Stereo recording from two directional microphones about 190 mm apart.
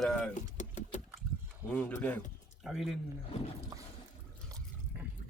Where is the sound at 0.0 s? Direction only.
5° left (ahead or behind).